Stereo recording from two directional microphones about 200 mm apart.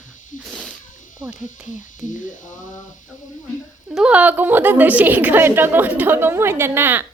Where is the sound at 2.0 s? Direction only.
40° left (ahead or behind).